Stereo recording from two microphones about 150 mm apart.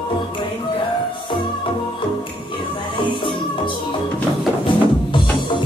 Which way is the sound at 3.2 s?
35° left (ahead or behind).